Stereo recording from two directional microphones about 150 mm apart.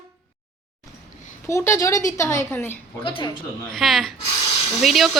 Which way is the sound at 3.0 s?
35° left (ahead or behind).